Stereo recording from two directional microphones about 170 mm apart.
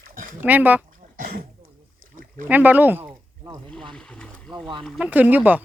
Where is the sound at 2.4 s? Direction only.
10° right (ahead or behind).